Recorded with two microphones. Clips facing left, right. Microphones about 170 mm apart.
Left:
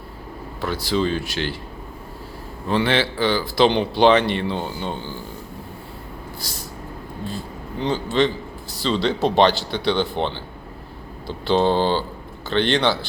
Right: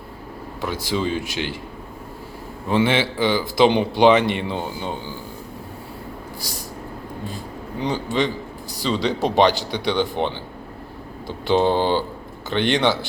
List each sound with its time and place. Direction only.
0.6 s speech: 15° right (ahead or behind)
2.6 s speech: 15° right (ahead or behind)
7.8 s speech: 10° right (ahead or behind)